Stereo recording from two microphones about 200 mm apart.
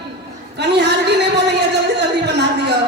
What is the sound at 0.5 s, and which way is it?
A woman's voice, 60° right (ahead or behind).